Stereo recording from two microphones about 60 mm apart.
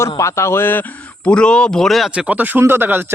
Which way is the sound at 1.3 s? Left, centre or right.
Centre.